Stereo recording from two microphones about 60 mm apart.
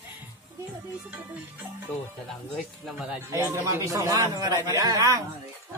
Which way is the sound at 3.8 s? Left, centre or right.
Right.